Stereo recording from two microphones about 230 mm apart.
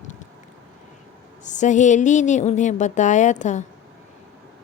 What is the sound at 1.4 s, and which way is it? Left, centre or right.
A woman's voice, left.